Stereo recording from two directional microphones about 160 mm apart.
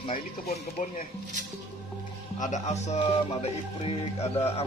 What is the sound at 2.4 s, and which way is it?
A man's voice, 50° left (ahead or behind).